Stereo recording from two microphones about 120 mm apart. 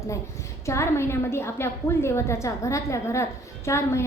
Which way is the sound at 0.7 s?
20° left (ahead or behind).